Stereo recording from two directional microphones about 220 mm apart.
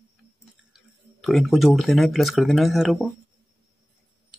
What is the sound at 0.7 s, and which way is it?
Speech, centre (ahead or behind).